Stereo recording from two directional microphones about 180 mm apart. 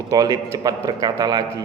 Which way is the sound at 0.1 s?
20° right (ahead or behind).